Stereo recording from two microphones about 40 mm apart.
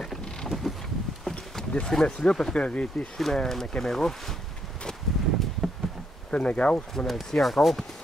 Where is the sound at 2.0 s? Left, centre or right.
Left.